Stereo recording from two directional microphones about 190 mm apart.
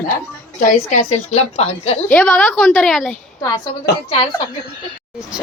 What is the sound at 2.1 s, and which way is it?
Speech, 5° left (ahead or behind).